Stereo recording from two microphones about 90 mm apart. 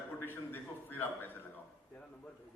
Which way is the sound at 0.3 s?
25° left (ahead or behind).